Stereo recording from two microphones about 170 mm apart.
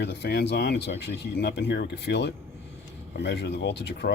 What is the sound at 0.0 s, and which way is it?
Speech, 80° left.